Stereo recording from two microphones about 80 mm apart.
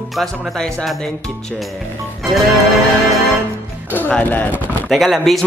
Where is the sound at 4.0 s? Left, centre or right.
Centre.